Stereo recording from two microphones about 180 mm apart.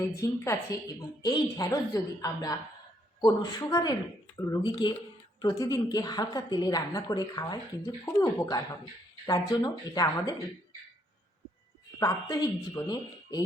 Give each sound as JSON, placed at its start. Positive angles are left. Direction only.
{"t": 0.1, "sound": "a woman's voice", "side_deg": 15}
{"t": 11.9, "sound": "a woman's voice", "side_deg": 20}